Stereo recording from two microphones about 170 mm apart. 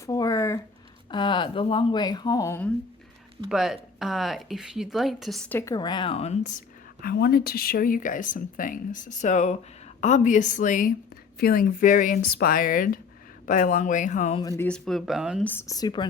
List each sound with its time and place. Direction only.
0.0 s a sound: 20° left (ahead or behind)
1.1 s speech: 30° left (ahead or behind); by 2.7 s 15° left (ahead or behind)
3.5 s speech: 5° right (ahead or behind)
5.5 s speech: 15° left (ahead or behind); by 6.6 s 45° left (ahead or behind)
7.0 s speech: 65° left (ahead or behind)
11.3 s speech: 60° left (ahead or behind); by 14.3 s 45° left (ahead or behind)
14.3 s speech: 20° left (ahead or behind)
14.7 s speech: centre (ahead or behind)
15.4 s speech: 15° left (ahead or behind)